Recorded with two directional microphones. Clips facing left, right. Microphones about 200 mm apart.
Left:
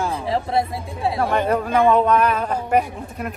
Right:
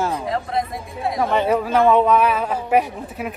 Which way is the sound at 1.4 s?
5° right (ahead or behind).